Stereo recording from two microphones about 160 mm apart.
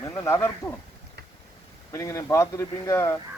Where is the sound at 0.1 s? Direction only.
15° left (ahead or behind).